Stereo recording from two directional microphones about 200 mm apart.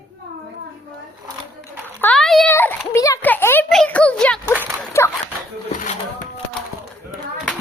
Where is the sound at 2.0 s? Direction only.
5° left (ahead or behind).